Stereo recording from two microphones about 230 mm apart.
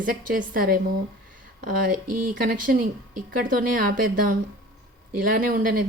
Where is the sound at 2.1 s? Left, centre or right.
Right.